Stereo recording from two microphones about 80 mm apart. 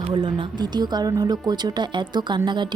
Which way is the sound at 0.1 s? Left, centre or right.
Right.